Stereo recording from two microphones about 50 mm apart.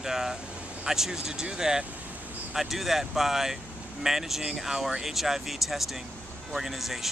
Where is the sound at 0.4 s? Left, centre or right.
Right.